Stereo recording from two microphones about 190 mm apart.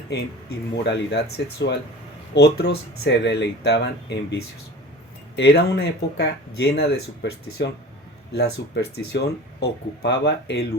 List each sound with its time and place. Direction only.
0.1 s speech: 60° left (ahead or behind)
5.4 s speech: 55° left (ahead or behind)